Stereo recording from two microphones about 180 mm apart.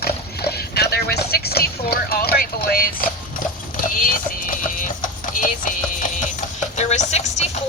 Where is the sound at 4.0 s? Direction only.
50° left (ahead or behind).